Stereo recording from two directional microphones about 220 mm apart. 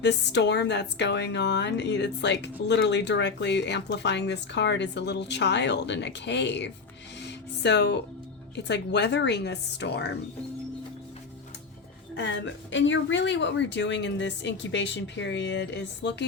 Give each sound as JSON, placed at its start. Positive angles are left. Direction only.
{"t": 0.0, "sound": "a woman's voice", "side_deg": 50}
{"t": 7.2, "sound": "music", "side_deg": 50}
{"t": 8.5, "sound": "a woman's voice", "side_deg": 50}
{"t": 12.1, "sound": "a woman's voice", "side_deg": 55}